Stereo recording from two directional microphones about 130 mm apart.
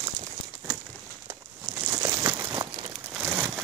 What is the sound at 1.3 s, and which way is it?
Crumpling, 20° right (ahead or behind).